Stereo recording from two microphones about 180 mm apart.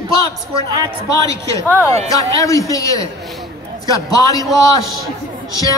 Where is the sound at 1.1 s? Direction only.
20° left (ahead or behind).